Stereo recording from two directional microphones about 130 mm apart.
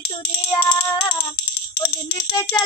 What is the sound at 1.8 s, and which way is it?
Music, 30° left (ahead or behind).